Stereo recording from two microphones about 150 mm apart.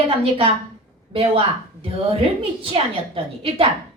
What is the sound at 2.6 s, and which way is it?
A woman's voice, 40° right (ahead or behind).